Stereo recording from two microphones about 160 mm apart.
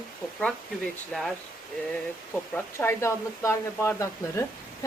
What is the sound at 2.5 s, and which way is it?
Speech, 15° left (ahead or behind).